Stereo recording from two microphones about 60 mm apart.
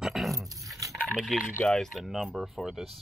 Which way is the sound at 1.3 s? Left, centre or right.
Centre.